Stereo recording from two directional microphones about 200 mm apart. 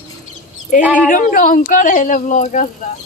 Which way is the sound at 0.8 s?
5° right (ahead or behind).